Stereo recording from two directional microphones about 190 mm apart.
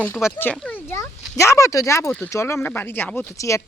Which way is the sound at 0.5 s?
5° left (ahead or behind).